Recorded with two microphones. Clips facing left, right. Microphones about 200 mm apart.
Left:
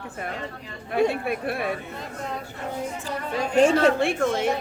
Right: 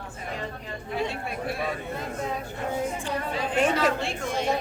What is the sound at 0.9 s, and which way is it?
Speech, 60° left (ahead or behind).